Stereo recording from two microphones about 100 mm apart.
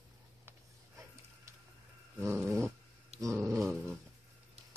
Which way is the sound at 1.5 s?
30° right (ahead or behind).